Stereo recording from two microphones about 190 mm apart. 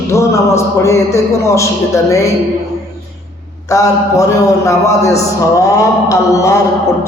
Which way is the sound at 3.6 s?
15° left (ahead or behind).